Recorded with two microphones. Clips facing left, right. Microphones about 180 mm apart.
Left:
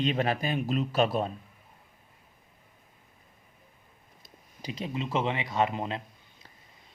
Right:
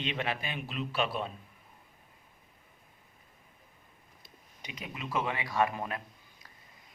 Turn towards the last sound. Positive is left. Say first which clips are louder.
# left 2 dB
turn(degrees=20)  # may be behind; listen again after turning